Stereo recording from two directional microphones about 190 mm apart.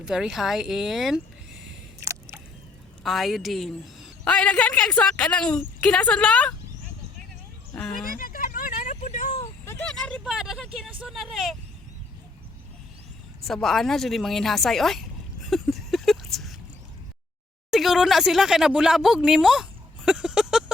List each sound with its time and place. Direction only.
0.0 s speech: 5° right (ahead or behind)
2.0 s single-lens reflex camera: 15° right (ahead or behind)
3.0 s a woman's voice: centre (ahead or behind)
7.8 s speech: 5° left (ahead or behind)
8.0 s vehicle: 50° left (ahead or behind)
9.6 s vehicle: 5° left (ahead or behind)
11.0 s a woman's voice: centre (ahead or behind)
13.4 s a woman's voice: centre (ahead or behind)
15.4 s a sound: centre (ahead or behind)
17.7 s speech: centre (ahead or behind)